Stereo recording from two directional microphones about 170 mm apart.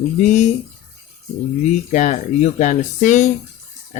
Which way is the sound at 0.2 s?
45° left (ahead or behind).